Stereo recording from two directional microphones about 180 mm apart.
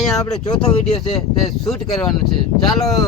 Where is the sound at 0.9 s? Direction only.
35° left (ahead or behind).